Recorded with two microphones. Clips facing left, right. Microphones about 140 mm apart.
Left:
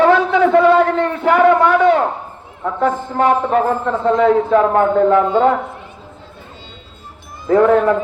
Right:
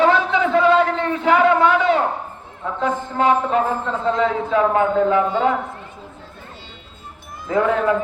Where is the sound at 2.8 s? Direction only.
50° left (ahead or behind).